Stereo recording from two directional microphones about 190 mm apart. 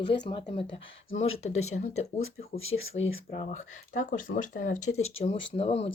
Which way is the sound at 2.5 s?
90° left.